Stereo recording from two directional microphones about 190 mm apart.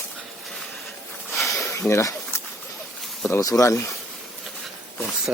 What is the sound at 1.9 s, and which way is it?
Speech, 15° left (ahead or behind).